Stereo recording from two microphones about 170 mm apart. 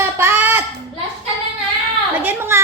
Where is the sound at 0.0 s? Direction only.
10° right (ahead or behind).